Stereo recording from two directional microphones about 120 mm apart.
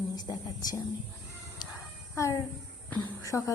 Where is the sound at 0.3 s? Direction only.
35° left (ahead or behind).